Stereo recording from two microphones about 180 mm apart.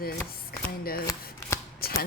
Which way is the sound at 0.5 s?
55° left (ahead or behind).